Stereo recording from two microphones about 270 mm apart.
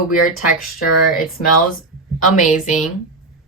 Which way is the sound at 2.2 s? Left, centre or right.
Left.